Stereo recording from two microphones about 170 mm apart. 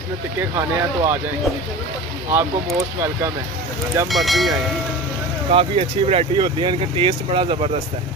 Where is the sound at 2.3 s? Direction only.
15° right (ahead or behind).